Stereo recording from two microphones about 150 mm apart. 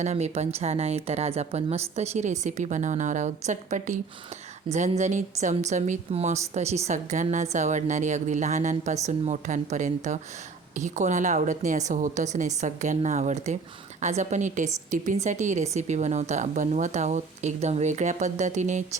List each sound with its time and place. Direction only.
0.0 s speech: 45° right (ahead or behind)